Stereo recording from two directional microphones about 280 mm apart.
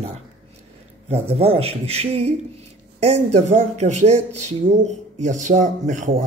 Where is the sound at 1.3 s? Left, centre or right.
Right.